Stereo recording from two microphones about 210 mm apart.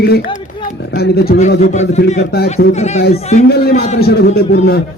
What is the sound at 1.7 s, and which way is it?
Speech, 30° left (ahead or behind).